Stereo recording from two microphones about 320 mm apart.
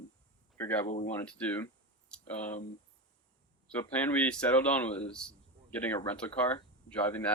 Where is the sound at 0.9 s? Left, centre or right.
Left.